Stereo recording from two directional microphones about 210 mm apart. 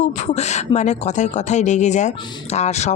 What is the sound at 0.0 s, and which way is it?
A woman's voice, 35° left (ahead or behind).